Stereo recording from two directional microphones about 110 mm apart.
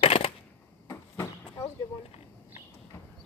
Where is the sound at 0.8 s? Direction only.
25° left (ahead or behind).